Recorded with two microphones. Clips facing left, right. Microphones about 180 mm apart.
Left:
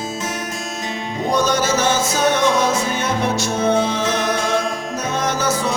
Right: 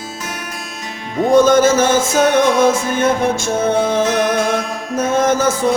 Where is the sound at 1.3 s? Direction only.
50° right (ahead or behind).